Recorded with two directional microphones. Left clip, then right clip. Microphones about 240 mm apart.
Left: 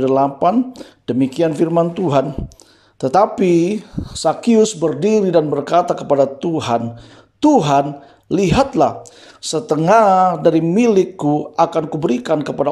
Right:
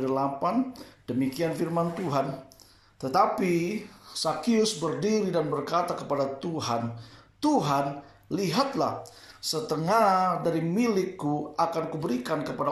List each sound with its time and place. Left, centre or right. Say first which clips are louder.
0.0 s speech: left 13 dB; left